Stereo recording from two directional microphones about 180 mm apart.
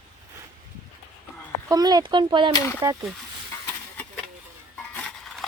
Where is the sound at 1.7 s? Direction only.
20° right (ahead or behind).